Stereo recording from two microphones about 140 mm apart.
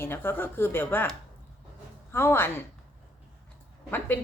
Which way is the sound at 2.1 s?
15° left (ahead or behind).